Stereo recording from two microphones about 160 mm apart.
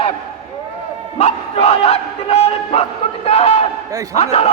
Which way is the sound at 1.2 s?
40° left (ahead or behind).